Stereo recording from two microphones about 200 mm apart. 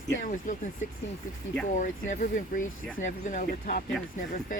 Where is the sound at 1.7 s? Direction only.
40° left (ahead or behind).